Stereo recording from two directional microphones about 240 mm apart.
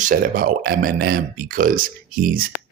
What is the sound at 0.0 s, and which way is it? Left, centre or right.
Speech, right.